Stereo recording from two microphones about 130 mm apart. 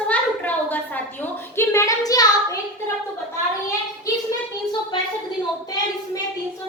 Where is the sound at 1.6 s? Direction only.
25° left (ahead or behind).